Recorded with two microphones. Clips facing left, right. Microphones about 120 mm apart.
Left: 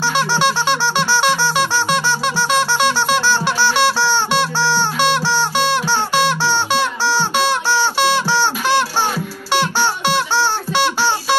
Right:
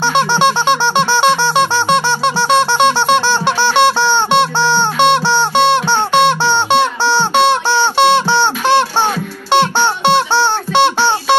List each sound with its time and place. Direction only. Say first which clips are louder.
0.0 s music: right 4 dB; 25° right (ahead or behind)